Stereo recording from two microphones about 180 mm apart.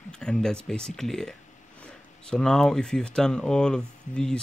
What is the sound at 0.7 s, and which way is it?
Speech, 5° left (ahead or behind).